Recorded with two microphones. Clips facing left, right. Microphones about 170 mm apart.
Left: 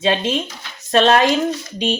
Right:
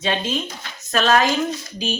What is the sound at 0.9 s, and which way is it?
Speech, 30° left (ahead or behind).